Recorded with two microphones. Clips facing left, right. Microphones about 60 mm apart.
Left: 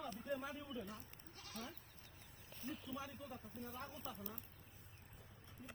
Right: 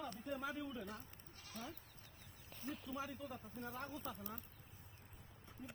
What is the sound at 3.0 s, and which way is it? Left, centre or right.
Speech, right.